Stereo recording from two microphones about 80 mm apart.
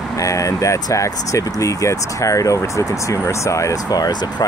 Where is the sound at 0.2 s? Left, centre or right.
Left.